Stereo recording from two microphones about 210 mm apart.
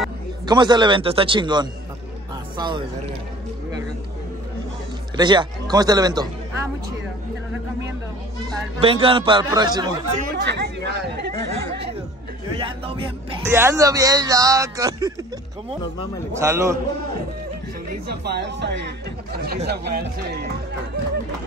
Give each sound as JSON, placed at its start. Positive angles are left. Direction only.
{"t": 0.5, "sound": "a man's voice", "side_deg": -20}
{"t": 5.1, "sound": "speech", "side_deg": -20}
{"t": 8.8, "sound": "a man's voice", "side_deg": -25}
{"t": 10.3, "sound": "speech", "side_deg": -55}
{"t": 12.5, "sound": "a man's voice", "side_deg": -25}
{"t": 13.4, "sound": "speech", "side_deg": -10}
{"t": 16.3, "sound": "speech", "side_deg": -15}
{"t": 17.8, "sound": "speech", "side_deg": -50}